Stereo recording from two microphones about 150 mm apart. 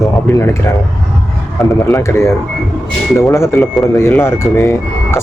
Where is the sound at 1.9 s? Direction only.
20° left (ahead or behind).